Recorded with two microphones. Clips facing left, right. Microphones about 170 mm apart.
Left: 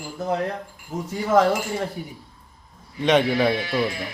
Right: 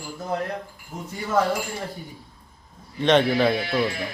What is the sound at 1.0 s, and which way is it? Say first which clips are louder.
Speech: left 4 dB; 90° left.